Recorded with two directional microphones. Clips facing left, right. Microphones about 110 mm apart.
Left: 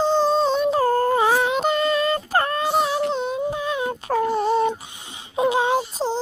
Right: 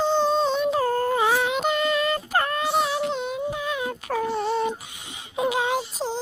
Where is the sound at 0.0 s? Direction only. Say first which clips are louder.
Left 3 dB; 35° left (ahead or behind).